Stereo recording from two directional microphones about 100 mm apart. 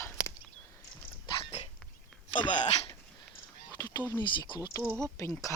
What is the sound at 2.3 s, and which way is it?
Speech, 55° left (ahead or behind).